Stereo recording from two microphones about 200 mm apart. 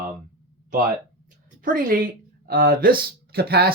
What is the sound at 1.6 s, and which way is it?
A woman's voice, 45° right (ahead or behind).